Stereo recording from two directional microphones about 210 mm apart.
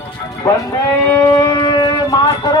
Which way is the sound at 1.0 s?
10° left (ahead or behind).